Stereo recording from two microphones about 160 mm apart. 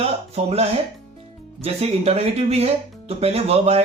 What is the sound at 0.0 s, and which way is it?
Speech, 40° right (ahead or behind).